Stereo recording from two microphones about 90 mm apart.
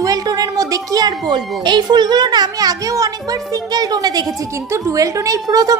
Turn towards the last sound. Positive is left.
turn(degrees=-40)  # may be behind; listen again after turning